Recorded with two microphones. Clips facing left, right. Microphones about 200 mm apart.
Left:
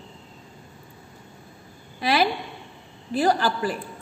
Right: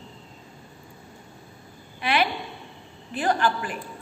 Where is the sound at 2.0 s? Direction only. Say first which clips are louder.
Left 3 dB; 35° left (ahead or behind).